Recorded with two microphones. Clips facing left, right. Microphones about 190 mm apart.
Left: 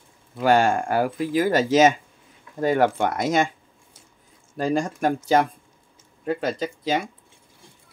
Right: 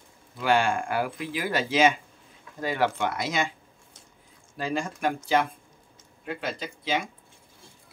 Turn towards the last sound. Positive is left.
turn(degrees=40)  # may be behind; listen again after turning